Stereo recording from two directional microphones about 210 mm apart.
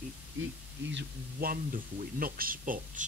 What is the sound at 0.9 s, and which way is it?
Speech, 45° right (ahead or behind).